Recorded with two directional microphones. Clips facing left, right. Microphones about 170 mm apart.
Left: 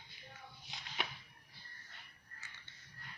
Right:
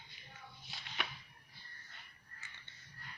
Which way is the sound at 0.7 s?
20° left (ahead or behind).